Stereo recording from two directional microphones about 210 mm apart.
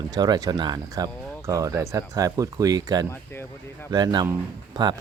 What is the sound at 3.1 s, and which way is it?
Speech, 10° left (ahead or behind).